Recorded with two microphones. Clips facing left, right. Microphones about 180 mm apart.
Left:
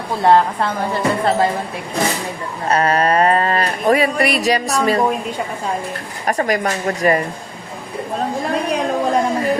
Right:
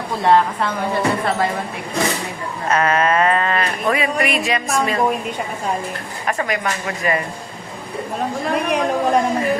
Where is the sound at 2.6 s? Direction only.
35° left (ahead or behind).